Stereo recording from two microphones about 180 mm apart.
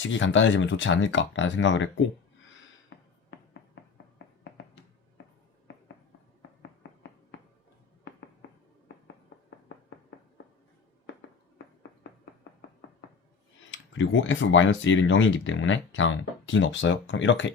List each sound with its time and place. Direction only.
0.0 s speech: 90° left
2.9 s music: 70° left (ahead or behind)
3.8 s a sound: 75° left (ahead or behind)
4.2 s music: 70° left (ahead or behind)
5.7 s a sound: 85° left
6.6 s tap: 75° left (ahead or behind)
13.7 s speech: 90° left